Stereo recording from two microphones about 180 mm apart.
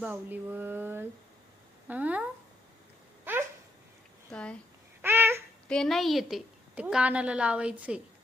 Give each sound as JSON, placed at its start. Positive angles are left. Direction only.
{"t": 0.0, "sound": "a woman's voice", "side_deg": -10}
{"t": 4.3, "sound": "speech", "side_deg": 5}
{"t": 5.0, "sound": "babbling", "side_deg": -15}
{"t": 5.6, "sound": "a woman's voice", "side_deg": 5}